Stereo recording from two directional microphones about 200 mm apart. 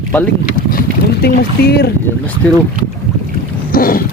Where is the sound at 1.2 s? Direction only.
50° left (ahead or behind).